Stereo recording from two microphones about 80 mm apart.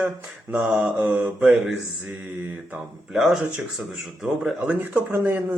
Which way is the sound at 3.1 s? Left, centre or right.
Centre.